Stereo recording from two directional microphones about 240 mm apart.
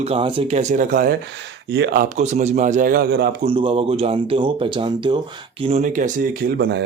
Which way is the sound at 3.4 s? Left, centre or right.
Right.